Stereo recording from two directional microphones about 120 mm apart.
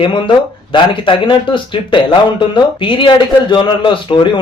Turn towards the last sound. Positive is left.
turn(degrees=45)  # may be behind; listen again after turning